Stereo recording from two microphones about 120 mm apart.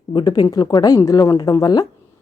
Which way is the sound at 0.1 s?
40° left (ahead or behind).